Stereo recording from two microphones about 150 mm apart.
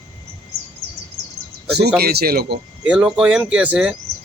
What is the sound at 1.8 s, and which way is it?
Speech, 90° right.